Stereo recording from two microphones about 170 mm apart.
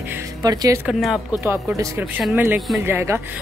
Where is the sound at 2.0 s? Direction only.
5° right (ahead or behind).